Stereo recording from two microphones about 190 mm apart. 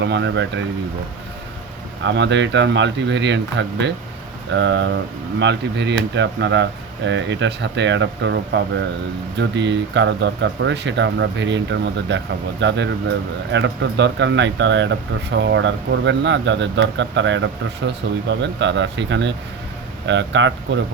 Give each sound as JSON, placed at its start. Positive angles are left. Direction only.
{"t": 0.0, "sound": "speech", "side_deg": -70}
{"t": 2.0, "sound": "speech", "side_deg": -70}